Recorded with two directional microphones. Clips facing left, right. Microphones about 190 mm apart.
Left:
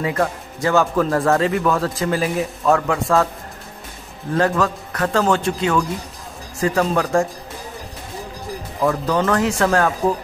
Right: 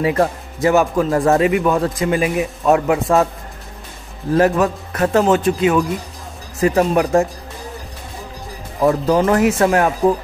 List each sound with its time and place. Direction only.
0.0 s speech: 25° right (ahead or behind)
4.4 s speech: 25° right (ahead or behind)
8.8 s speech: 25° right (ahead or behind)